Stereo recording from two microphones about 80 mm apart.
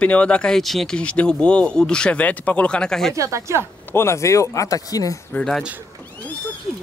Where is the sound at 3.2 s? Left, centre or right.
Right.